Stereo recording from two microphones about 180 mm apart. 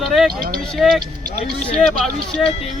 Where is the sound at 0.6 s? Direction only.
Centre (ahead or behind).